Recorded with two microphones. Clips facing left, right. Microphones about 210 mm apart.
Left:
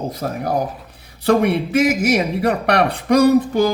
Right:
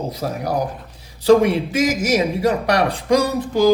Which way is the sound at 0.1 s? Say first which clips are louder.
Left 1 dB; 50° left (ahead or behind).